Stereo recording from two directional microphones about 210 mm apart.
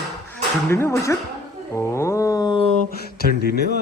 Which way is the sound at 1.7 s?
15° left (ahead or behind).